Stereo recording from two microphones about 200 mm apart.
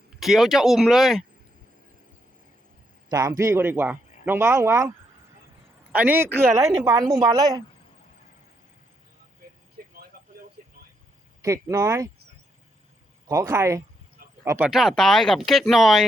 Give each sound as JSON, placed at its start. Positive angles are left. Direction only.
{"t": 0.2, "sound": "speech", "side_deg": 0}
{"t": 3.1, "sound": "a man's voice", "side_deg": -15}
{"t": 5.9, "sound": "a man's voice", "side_deg": -10}
{"t": 11.4, "sound": "a man's voice", "side_deg": -15}
{"t": 13.2, "sound": "a man's voice", "side_deg": -15}
{"t": 14.7, "sound": "speech", "side_deg": 0}